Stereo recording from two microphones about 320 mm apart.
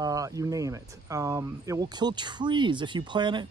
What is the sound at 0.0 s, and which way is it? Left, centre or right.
Speech, centre.